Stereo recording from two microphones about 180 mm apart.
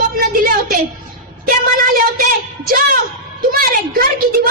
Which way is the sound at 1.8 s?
50° right (ahead or behind).